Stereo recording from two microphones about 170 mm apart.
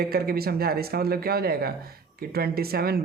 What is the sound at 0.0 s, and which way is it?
Speech, 65° right (ahead or behind).